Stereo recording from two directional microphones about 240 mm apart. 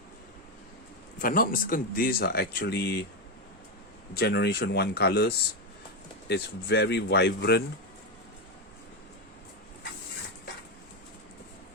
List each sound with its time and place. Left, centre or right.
1.2 s speech: left
4.1 s speech: left